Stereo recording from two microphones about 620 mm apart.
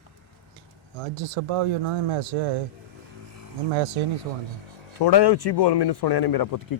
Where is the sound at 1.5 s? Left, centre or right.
Right.